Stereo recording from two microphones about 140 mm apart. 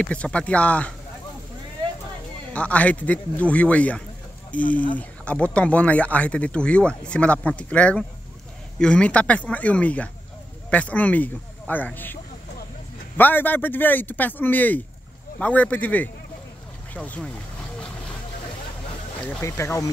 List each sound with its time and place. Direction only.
0.0 s speech: 10° left (ahead or behind)
2.5 s speech: 10° left (ahead or behind)
13.2 s speech: 15° left (ahead or behind)
19.4 s speech: 20° left (ahead or behind)